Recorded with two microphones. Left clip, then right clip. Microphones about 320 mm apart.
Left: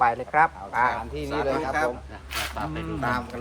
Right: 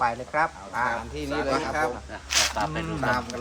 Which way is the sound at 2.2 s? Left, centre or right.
Right.